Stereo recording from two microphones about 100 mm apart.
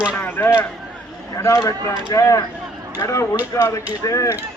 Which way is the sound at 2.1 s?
30° left (ahead or behind).